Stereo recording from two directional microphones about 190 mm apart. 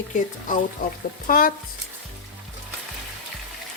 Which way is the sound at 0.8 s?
45° left (ahead or behind).